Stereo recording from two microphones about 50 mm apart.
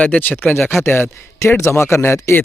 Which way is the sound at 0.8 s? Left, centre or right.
Left.